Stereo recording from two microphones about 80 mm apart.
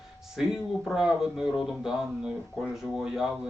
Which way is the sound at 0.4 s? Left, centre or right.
Centre.